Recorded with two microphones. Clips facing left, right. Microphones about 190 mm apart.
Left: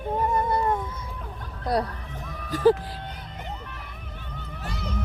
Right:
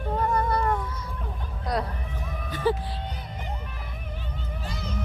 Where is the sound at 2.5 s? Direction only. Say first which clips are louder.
Left 7 dB; 90° left.